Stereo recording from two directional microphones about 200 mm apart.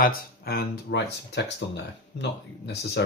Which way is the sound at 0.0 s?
50° left (ahead or behind).